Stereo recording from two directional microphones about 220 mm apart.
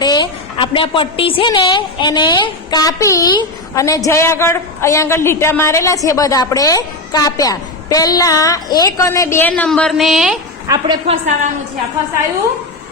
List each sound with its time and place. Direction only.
0.0 s a woman's voice: 20° left (ahead or behind); by 10.3 s centre (ahead or behind)
10.7 s a woman's voice: 20° right (ahead or behind)